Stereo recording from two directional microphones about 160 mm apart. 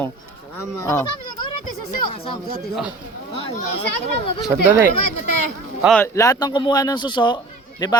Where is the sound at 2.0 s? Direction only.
35° left (ahead or behind).